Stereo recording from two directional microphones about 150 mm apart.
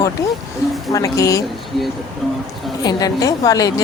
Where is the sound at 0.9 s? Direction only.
20° left (ahead or behind).